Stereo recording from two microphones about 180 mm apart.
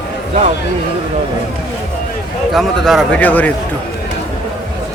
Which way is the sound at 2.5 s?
Centre (ahead or behind).